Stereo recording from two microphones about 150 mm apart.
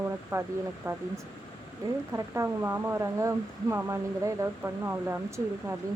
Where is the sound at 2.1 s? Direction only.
20° right (ahead or behind).